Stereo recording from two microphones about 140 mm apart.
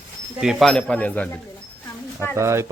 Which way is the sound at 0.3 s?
Centre (ahead or behind).